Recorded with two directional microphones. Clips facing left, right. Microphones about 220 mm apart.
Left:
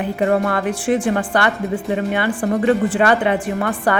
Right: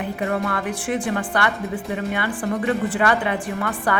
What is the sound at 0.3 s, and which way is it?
Speech, 40° left (ahead or behind).